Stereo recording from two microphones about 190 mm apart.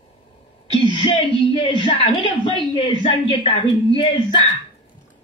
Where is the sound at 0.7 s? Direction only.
25° left (ahead or behind).